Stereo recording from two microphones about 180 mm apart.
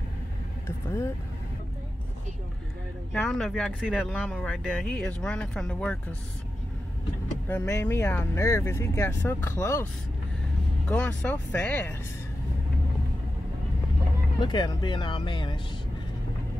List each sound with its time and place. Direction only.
0.7 s speech: 15° left (ahead or behind)
3.1 s speech: centre (ahead or behind)
7.4 s speech: 15° left (ahead or behind)
10.9 s speech: 5° left (ahead or behind)
14.4 s speech: 25° left (ahead or behind)